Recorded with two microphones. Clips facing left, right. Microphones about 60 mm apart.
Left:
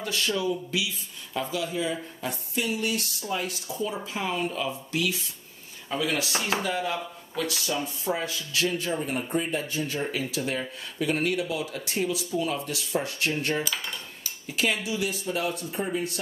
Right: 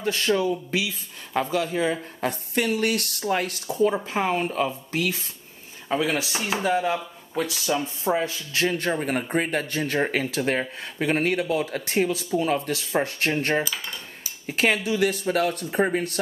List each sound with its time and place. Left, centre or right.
0.0 s speech: right
5.9 s speech: right
10.6 s speech: right
13.7 s cutlery: centre
14.4 s speech: right